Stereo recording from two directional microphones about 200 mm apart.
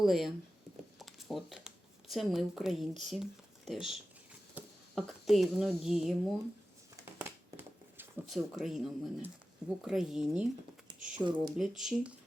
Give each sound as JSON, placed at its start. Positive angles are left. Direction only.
{"t": 0.0, "sound": "speech", "side_deg": 0}
{"t": 0.9, "sound": "a sound", "side_deg": 0}
{"t": 3.0, "sound": "speech", "side_deg": 0}
{"t": 7.2, "sound": "a sound", "side_deg": -10}
{"t": 8.4, "sound": "speech", "side_deg": 0}
{"t": 11.2, "sound": "speech", "side_deg": -20}
{"t": 11.8, "sound": "speech", "side_deg": 0}